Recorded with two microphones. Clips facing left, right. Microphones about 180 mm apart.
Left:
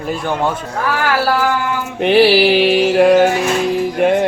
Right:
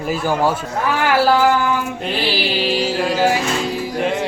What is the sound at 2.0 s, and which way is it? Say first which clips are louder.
Music: left 11 dB; 75° left (ahead or behind).